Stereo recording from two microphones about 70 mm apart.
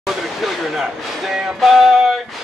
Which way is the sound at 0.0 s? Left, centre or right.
Centre.